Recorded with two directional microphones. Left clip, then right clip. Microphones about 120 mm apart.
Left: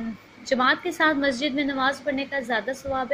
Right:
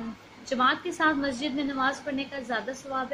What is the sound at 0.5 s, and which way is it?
A woman's voice, 45° left (ahead or behind).